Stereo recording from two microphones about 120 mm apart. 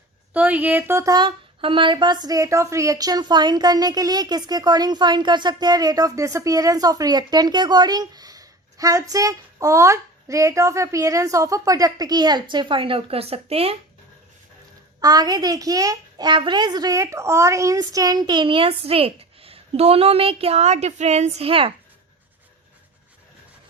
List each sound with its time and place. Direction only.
0.3 s speech: 15° right (ahead or behind)
1.1 s a woman's voice: 45° right (ahead or behind)
15.0 s a woman's voice: 35° right (ahead or behind); by 21.7 s 50° right (ahead or behind)